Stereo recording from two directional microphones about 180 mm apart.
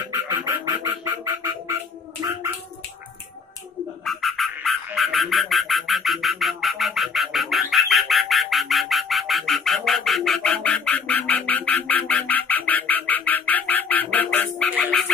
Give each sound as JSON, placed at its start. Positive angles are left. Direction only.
{"t": 0.1, "sound": "music", "side_deg": -20}
{"t": 2.2, "sound": "a sound", "side_deg": -15}
{"t": 4.0, "sound": "frog", "side_deg": 0}